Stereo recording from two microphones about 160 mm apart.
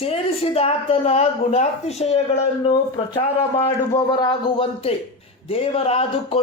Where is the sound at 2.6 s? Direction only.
30° left (ahead or behind).